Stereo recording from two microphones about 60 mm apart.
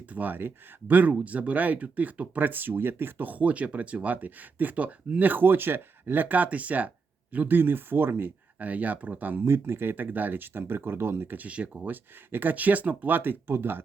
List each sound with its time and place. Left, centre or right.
0.1 s speech: right
8.5 s speech: right
9.4 s speech: right
9.9 s speech: right